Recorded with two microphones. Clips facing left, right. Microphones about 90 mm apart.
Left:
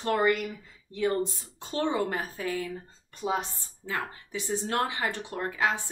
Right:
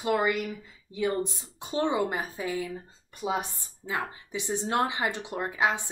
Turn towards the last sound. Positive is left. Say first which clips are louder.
# right 1 dB
turn(degrees=-20)  # may be behind; listen again after turning